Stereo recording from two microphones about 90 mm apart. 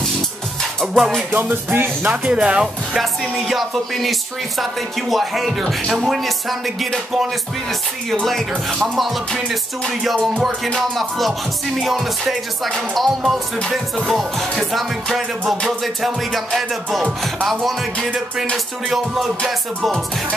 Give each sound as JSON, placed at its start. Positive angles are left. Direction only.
{"t": 0.9, "sound": "music", "side_deg": -5}
{"t": 1.3, "sound": "music", "side_deg": -20}
{"t": 2.3, "sound": "music", "side_deg": -10}